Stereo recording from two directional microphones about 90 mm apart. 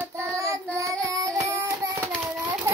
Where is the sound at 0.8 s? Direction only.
35° right (ahead or behind).